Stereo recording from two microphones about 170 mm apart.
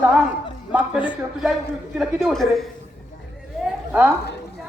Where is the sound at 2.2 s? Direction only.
Centre (ahead or behind).